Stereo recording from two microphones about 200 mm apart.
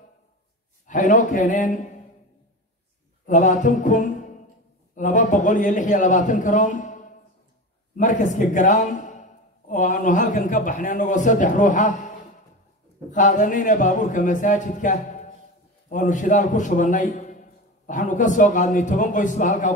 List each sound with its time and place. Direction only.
0.8 s a man's voice: 40° left (ahead or behind)
3.3 s a man's voice: 35° left (ahead or behind)
8.0 s a man's voice: 40° left (ahead or behind)
13.1 s a man's voice: 40° left (ahead or behind)